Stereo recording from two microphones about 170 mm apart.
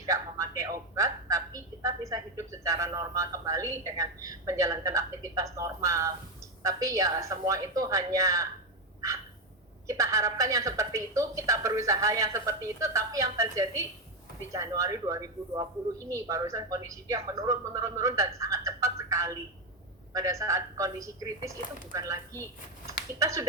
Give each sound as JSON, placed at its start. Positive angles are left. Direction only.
{"t": 0.0, "sound": "speech", "side_deg": -20}
{"t": 9.8, "sound": "a woman's voice", "side_deg": -20}